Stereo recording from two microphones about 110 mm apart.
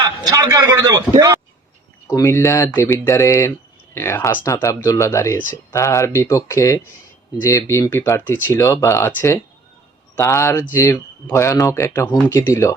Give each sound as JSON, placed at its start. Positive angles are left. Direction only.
{"t": 0.3, "sound": "a man's voice", "side_deg": -30}
{"t": 2.0, "sound": "speech", "side_deg": 25}